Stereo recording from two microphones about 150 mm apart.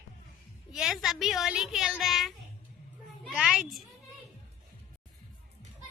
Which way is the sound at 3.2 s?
5° right (ahead or behind).